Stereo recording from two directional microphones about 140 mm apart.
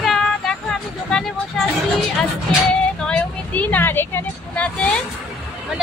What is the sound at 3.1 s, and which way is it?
Speech, 10° left (ahead or behind).